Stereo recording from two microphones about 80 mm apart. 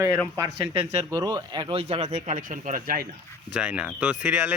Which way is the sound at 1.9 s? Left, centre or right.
Right.